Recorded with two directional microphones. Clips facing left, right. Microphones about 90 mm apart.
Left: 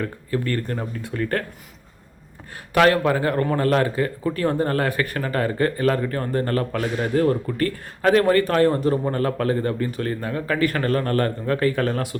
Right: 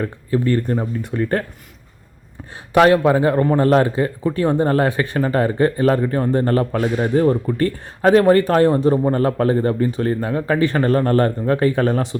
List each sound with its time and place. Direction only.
0.0 s speech: 15° right (ahead or behind)
2.7 s speech: 15° right (ahead or behind)